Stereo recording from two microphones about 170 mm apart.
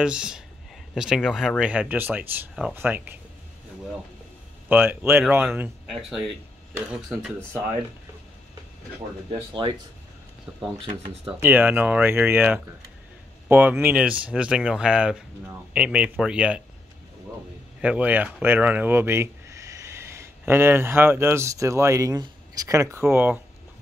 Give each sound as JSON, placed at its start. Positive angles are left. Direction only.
{"t": 0.0, "sound": "speech", "side_deg": -5}
{"t": 4.6, "sound": "speech", "side_deg": -10}
{"t": 5.9, "sound": "speech", "side_deg": 0}
{"t": 9.3, "sound": "speech", "side_deg": -25}
{"t": 11.4, "sound": "speech", "side_deg": -10}
{"t": 17.8, "sound": "speech", "side_deg": -10}